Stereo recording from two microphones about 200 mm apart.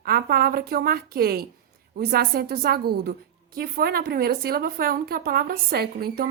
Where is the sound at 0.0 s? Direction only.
50° right (ahead or behind).